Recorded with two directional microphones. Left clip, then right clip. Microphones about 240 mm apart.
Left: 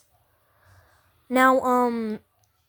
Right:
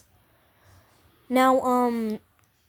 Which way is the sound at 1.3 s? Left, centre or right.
Centre.